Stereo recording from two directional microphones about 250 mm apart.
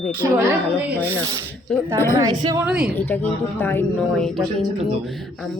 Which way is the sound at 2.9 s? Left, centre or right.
Centre.